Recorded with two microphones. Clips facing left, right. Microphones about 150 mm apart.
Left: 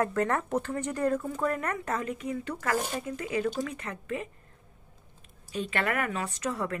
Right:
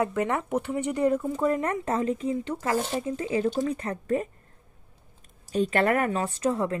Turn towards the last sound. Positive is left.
turn(degrees=-30)  # may be behind; listen again after turning